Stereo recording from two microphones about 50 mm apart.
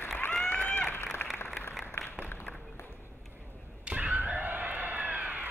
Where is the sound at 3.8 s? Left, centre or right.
Right.